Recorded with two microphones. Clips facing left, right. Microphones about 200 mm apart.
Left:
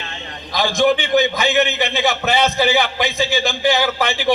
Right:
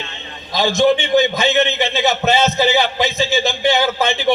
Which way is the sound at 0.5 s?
25° right (ahead or behind).